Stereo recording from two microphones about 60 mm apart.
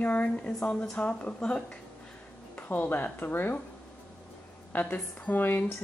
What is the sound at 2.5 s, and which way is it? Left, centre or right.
A woman's voice, left.